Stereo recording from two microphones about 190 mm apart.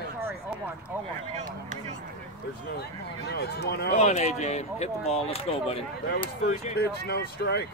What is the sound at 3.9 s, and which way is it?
Speech, 35° left (ahead or behind).